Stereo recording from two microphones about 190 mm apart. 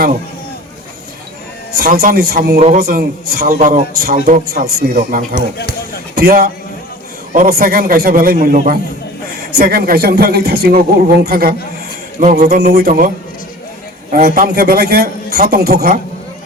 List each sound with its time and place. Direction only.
1.7 s speech: 50° right (ahead or behind)
14.1 s speech: 50° right (ahead or behind)